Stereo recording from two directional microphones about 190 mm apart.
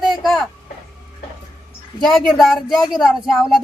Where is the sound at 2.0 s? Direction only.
Centre (ahead or behind).